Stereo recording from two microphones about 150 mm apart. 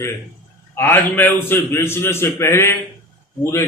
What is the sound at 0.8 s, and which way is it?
Speech, 15° left (ahead or behind).